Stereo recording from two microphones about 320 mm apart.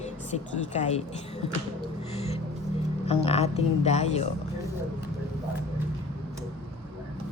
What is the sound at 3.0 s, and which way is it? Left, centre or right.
Speech, centre.